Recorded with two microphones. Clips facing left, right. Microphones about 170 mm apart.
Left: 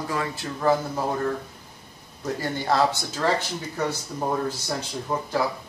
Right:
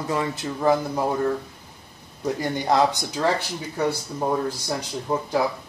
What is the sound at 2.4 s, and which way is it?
Speech, 15° right (ahead or behind).